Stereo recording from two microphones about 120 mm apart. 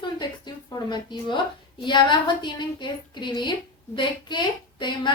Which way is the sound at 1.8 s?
40° left (ahead or behind).